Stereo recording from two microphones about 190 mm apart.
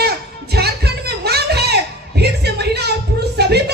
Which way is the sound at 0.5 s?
55° right (ahead or behind).